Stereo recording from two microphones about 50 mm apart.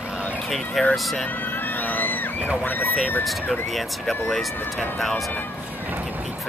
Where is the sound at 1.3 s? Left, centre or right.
Left.